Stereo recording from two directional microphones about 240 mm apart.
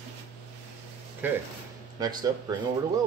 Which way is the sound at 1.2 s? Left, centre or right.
Centre.